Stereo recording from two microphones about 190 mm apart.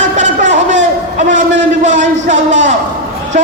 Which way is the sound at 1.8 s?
40° right (ahead or behind).